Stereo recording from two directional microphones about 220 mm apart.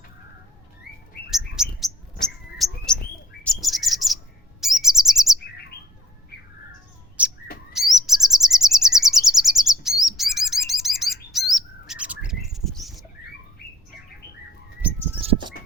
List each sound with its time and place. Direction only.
1.3 s bird: centre (ahead or behind)
3.4 s chirp: centre (ahead or behind)
6.3 s bird: 45° left (ahead or behind)
7.2 s bird: 5° right (ahead or behind)
7.7 s chirp: centre (ahead or behind)